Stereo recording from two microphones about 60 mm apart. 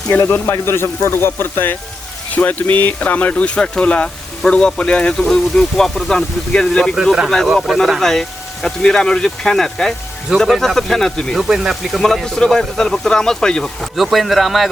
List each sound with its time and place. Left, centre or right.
0.2 s speech: left
2.3 s speech: left
6.9 s speech: centre
7.3 s speech: centre
11.3 s speech: centre
13.9 s speech: centre